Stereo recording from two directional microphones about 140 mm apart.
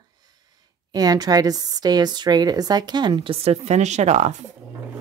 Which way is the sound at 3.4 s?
50° right (ahead or behind).